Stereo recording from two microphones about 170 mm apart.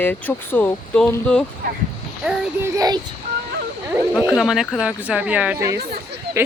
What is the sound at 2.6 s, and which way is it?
Speech, 20° right (ahead or behind).